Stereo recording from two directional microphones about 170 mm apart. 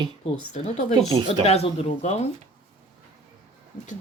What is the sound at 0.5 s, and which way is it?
Speech, 40° left (ahead or behind).